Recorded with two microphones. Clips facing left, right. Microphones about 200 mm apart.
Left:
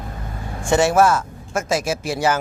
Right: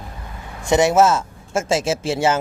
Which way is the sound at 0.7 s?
20° right (ahead or behind).